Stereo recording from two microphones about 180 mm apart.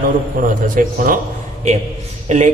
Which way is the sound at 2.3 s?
40° right (ahead or behind).